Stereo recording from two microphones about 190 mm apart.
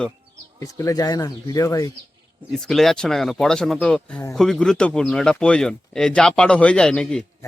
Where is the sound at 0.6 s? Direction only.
15° left (ahead or behind).